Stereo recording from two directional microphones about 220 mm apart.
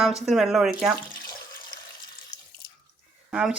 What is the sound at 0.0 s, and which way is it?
Speech, centre (ahead or behind).